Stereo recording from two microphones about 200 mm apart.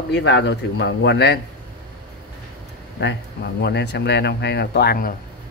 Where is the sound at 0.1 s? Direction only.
60° left (ahead or behind).